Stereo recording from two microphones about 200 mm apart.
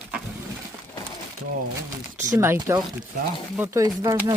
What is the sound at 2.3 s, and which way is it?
Speech, 15° right (ahead or behind).